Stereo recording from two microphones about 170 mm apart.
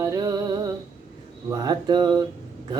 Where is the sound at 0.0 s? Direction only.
20° right (ahead or behind).